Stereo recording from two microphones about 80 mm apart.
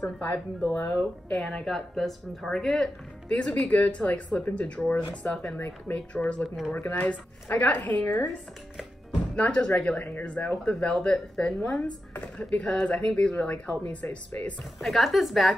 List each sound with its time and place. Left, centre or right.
0.7 s speech: left
1.3 s speech: centre
6.4 s a woman's voice: centre
6.7 s speech: centre
9.3 s speech: centre
12.1 s speech: centre
14.6 s a woman's voice: centre